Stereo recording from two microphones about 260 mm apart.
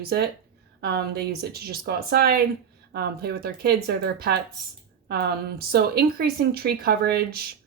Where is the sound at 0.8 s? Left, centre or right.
Right.